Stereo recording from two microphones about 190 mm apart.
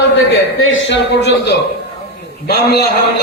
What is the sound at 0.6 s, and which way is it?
Speech, 75° left (ahead or behind).